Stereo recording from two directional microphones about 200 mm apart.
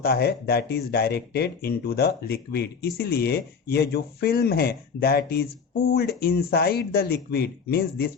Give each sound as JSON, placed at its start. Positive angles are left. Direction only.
{"t": 0.0, "sound": "speech", "side_deg": 50}